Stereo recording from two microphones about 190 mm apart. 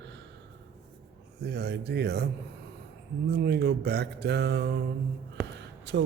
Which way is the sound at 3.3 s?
60° right (ahead or behind).